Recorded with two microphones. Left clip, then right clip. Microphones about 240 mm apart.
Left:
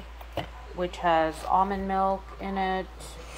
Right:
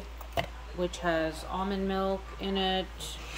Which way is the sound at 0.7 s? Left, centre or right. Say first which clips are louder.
Left 6 dB; centre.